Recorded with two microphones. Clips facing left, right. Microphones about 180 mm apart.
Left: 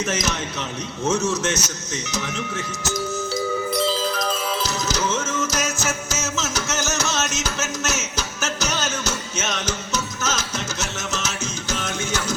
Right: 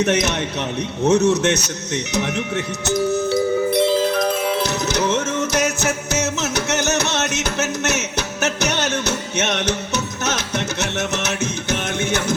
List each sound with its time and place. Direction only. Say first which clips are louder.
0.0 s speech: right 6 dB; 65° right (ahead or behind)
3.7 s music: right 6 dB; 60° right (ahead or behind)